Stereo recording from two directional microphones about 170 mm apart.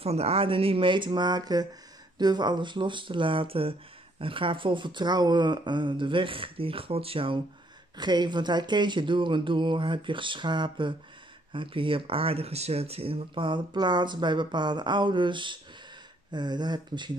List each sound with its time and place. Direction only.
0.0 s speech: 35° right (ahead or behind)